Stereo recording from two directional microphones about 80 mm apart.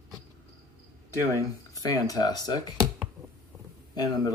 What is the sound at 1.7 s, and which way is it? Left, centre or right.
Speech, left.